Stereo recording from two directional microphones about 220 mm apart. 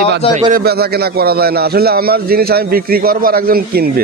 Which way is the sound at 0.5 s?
45° right (ahead or behind).